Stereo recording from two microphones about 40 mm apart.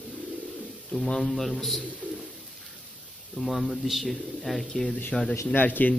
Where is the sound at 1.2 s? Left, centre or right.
Centre.